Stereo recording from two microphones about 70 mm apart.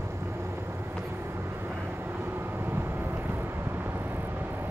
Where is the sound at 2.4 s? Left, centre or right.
Right.